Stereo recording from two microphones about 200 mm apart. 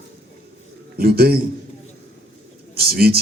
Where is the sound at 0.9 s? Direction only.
50° right (ahead or behind).